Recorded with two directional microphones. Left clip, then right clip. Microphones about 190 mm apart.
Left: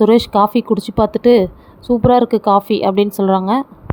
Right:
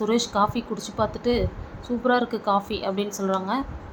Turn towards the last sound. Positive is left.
turn(degrees=50)  # may be behind; listen again after turning